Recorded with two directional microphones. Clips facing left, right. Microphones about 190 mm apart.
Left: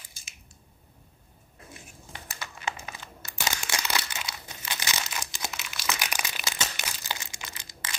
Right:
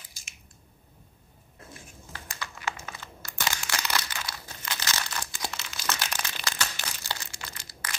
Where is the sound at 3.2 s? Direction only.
20° left (ahead or behind).